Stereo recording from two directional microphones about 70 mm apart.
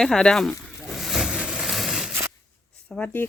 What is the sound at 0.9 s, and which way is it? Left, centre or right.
Vehicle, centre.